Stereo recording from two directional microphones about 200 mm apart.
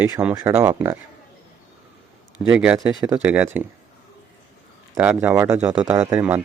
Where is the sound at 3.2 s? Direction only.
10° right (ahead or behind).